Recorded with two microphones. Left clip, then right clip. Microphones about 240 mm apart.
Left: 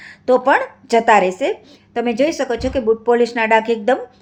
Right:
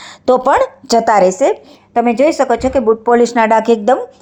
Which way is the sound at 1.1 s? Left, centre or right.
Centre.